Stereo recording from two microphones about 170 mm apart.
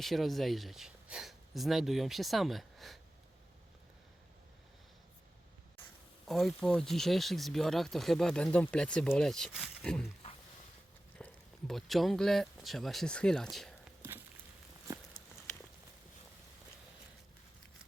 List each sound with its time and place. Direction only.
0.0 s speech: centre (ahead or behind)
6.2 s speech: centre (ahead or behind)
11.2 s a sound: 5° left (ahead or behind)
11.7 s speech: centre (ahead or behind)